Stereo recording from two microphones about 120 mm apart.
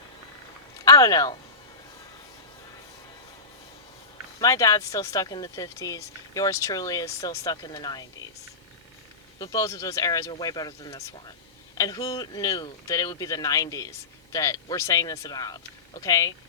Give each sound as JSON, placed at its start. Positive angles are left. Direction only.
{"t": 0.9, "sound": "speech", "side_deg": 30}
{"t": 4.4, "sound": "speech", "side_deg": 30}
{"t": 9.4, "sound": "speech", "side_deg": 30}